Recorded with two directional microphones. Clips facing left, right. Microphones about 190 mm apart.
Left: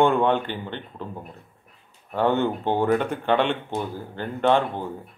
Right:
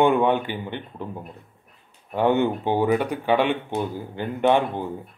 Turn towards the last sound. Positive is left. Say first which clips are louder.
# right 1 dB
turn(degrees=-15)  # may be behind; listen again after turning